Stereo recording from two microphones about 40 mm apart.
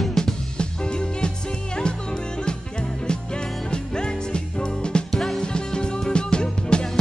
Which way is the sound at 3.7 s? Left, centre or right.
Left.